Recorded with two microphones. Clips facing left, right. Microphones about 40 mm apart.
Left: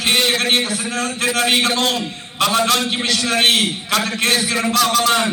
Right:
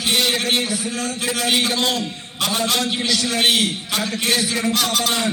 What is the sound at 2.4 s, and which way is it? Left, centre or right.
Speech, left.